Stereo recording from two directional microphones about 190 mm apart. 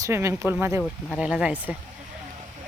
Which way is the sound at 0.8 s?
Centre (ahead or behind).